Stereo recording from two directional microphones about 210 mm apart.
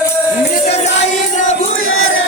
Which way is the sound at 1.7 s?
70° left (ahead or behind).